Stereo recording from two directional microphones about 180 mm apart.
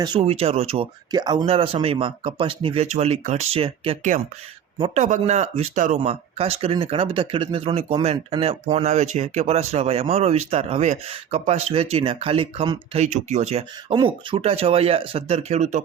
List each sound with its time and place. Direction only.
0.2 s speech: 35° right (ahead or behind)
1.1 s speech: 25° right (ahead or behind); by 15.8 s 40° right (ahead or behind)